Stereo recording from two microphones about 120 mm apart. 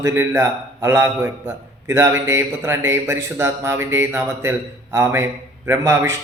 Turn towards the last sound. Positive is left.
turn(degrees=-20)  # may be behind; listen again after turning